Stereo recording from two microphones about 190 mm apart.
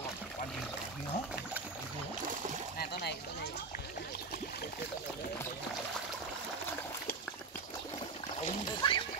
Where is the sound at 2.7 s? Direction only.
60° left (ahead or behind).